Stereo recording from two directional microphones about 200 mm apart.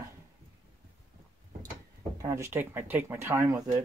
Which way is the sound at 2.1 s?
15° right (ahead or behind).